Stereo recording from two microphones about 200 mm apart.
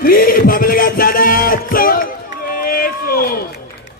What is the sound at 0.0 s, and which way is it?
Music, 45° left (ahead or behind).